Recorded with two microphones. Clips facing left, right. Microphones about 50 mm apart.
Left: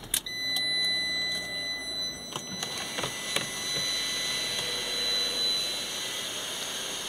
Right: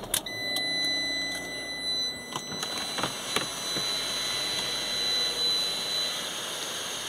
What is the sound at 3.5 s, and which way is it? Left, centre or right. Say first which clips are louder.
Vacuum cleaner: even; centre.